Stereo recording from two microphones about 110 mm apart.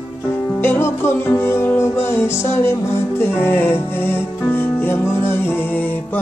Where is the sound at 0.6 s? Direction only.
20° left (ahead or behind).